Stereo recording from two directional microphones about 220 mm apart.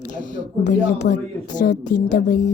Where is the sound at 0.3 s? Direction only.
35° left (ahead or behind).